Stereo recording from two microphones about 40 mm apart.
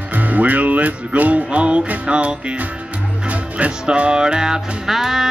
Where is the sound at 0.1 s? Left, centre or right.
Right.